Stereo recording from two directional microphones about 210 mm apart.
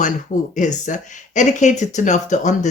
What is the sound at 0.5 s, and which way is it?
Speech, 35° left (ahead or behind).